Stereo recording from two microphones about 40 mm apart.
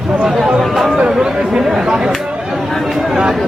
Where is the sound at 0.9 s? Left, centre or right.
Right.